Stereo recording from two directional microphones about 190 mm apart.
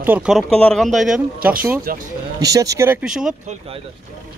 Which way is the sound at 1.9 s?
50° right (ahead or behind).